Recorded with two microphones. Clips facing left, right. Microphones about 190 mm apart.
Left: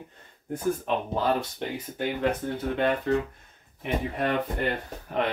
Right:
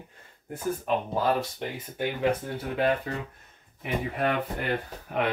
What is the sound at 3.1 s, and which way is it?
Speech, 5° right (ahead or behind).